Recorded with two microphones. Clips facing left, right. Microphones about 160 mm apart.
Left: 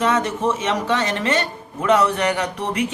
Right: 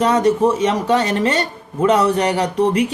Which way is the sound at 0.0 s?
35° right (ahead or behind).